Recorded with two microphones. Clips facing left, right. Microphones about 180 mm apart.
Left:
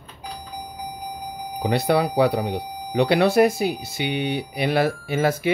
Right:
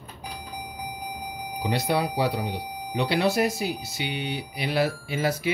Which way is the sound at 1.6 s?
60° left (ahead or behind).